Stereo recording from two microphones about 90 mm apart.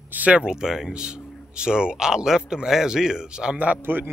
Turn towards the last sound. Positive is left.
turn(degrees=-20)  # may be behind; listen again after turning